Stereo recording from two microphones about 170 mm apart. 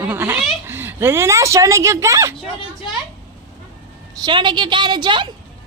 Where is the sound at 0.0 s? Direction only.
15° right (ahead or behind).